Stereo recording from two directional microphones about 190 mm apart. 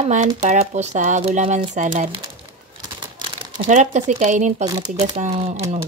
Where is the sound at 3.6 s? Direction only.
40° right (ahead or behind).